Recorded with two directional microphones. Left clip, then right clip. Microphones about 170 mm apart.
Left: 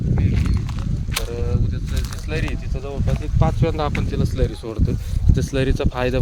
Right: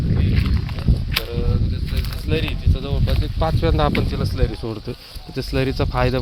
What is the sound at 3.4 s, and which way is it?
Speech, 30° right (ahead or behind).